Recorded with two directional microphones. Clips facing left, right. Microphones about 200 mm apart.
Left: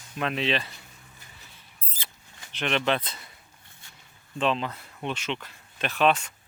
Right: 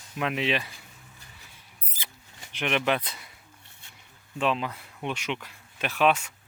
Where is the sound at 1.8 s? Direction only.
15° right (ahead or behind).